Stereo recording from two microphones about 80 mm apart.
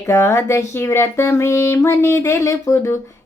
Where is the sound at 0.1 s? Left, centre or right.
Left.